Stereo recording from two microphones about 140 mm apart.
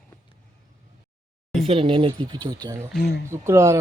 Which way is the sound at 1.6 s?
40° right (ahead or behind).